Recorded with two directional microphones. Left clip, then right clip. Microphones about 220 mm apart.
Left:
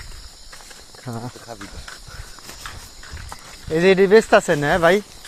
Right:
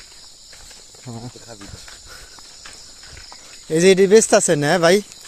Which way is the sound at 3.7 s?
45° right (ahead or behind).